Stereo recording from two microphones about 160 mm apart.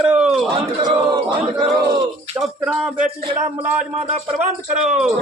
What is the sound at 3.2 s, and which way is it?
Speech, 35° right (ahead or behind).